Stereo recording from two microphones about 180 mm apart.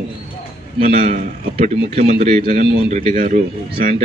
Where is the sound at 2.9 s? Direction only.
45° right (ahead or behind).